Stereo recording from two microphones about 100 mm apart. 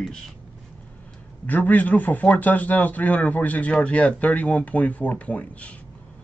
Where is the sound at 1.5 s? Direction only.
15° left (ahead or behind).